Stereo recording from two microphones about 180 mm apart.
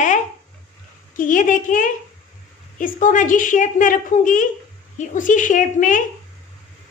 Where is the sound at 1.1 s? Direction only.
45° left (ahead or behind).